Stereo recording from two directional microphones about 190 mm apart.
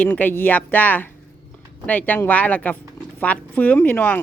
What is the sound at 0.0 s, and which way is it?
Speech, 10° left (ahead or behind).